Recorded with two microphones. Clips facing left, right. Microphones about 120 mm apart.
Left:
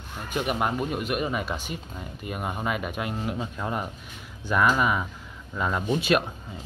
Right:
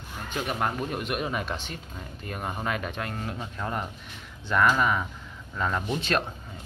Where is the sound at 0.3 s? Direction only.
10° left (ahead or behind).